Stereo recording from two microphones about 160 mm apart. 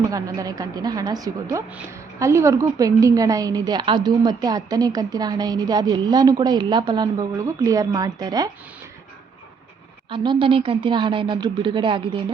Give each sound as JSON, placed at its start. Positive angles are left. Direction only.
{"t": 0.0, "sound": "a woman's voice", "side_deg": -20}
{"t": 10.1, "sound": "speech", "side_deg": -30}